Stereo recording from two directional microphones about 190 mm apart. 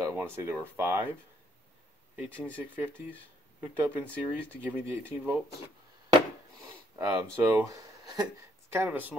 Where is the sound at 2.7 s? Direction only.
10° right (ahead or behind).